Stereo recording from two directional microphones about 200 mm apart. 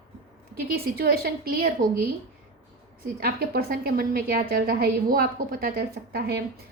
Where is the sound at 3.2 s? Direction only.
50° right (ahead or behind).